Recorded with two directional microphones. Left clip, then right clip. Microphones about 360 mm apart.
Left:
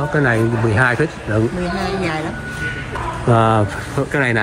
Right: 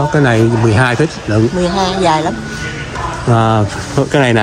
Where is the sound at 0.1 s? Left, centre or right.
Centre.